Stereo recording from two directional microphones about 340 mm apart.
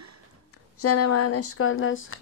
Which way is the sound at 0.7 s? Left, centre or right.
Left.